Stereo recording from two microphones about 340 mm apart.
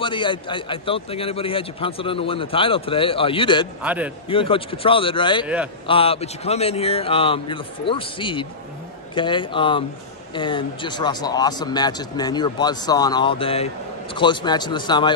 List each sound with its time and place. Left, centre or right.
0.0 s a man's voice: centre
3.8 s a man's voice: centre
4.3 s a man's voice: centre